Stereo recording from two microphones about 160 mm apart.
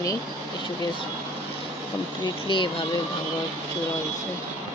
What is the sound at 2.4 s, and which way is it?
Speech, 30° left (ahead or behind).